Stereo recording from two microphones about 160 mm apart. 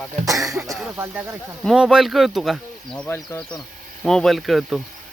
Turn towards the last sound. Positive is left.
turn(degrees=0)  # may be behind; listen again after turning